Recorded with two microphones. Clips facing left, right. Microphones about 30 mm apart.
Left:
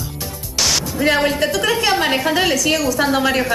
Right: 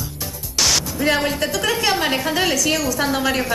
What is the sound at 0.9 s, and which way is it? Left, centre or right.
A woman's voice, centre.